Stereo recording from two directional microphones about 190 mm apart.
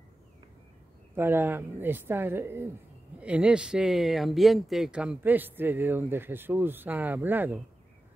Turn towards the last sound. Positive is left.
turn(degrees=-10)  # may be behind; listen again after turning